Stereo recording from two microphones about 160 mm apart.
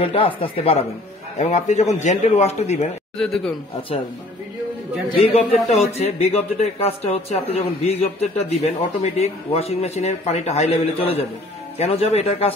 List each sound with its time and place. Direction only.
0.4 s a man's voice: 40° left (ahead or behind)
3.2 s a man's voice: 5° left (ahead or behind)
5.2 s a man's voice: 40° left (ahead or behind)